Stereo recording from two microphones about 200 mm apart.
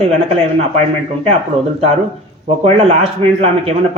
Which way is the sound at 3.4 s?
30° right (ahead or behind).